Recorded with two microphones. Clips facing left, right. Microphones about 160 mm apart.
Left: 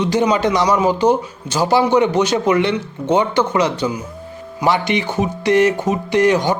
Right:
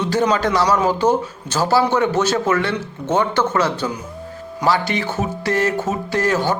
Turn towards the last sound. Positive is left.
turn(degrees=15)  # may be behind; listen again after turning